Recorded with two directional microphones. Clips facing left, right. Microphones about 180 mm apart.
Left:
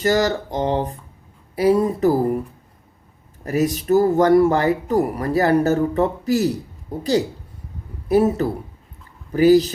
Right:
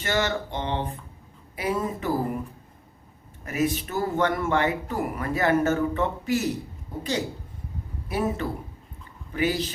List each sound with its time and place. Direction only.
0.0 s speech: 40° left (ahead or behind)
3.4 s speech: 35° left (ahead or behind)
8.0 s speech: 40° left (ahead or behind)